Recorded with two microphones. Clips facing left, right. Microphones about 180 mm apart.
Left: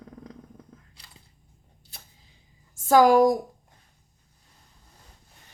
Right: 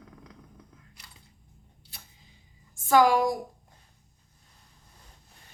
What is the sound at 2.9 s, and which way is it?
Speech, 45° left (ahead or behind).